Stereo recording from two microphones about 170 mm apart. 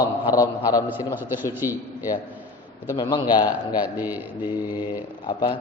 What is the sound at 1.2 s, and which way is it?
Speech, 15° right (ahead or behind).